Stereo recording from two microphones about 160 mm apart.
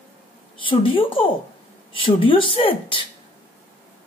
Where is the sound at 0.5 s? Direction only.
35° left (ahead or behind).